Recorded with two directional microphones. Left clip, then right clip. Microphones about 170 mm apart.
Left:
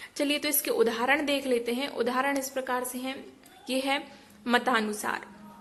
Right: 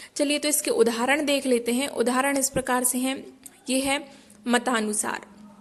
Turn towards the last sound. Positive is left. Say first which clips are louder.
# right 1 dB
turn(degrees=-35)  # may be behind; listen again after turning